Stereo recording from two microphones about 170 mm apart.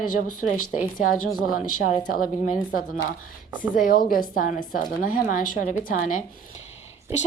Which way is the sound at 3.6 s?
55° left (ahead or behind).